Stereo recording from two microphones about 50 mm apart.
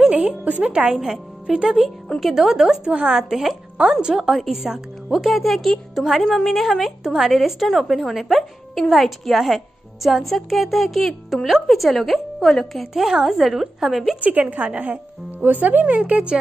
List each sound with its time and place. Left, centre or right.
0.5 s a woman's voice: right
2.1 s a woman's voice: centre
2.9 s a woman's voice: right
3.2 s a woman's voice: centre
12.9 s a woman's voice: centre
14.2 s a woman's voice: right